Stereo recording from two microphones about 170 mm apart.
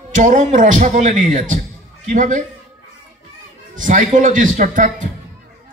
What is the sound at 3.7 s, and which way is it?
A man's voice, 50° right (ahead or behind).